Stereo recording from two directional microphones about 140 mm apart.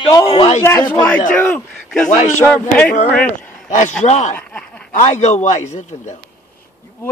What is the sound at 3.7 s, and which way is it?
Speech, 55° left (ahead or behind).